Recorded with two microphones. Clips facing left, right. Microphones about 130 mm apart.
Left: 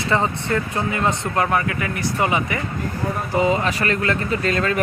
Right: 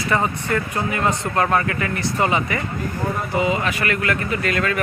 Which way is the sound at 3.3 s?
35° left (ahead or behind).